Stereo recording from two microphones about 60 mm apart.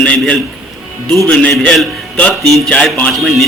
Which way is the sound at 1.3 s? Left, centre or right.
Left.